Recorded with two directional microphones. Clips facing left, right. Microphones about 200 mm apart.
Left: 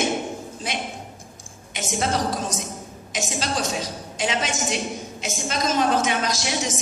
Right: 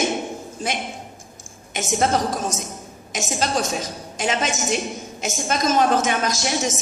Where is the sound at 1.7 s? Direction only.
50° right (ahead or behind).